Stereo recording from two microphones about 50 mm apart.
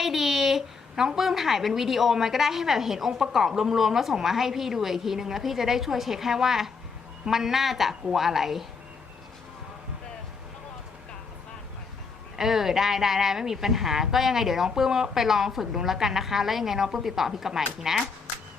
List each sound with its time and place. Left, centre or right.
0.0 s a woman's voice: centre
12.4 s a woman's voice: centre